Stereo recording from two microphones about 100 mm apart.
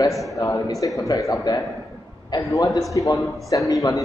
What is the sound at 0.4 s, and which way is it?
A man's voice, 35° left (ahead or behind).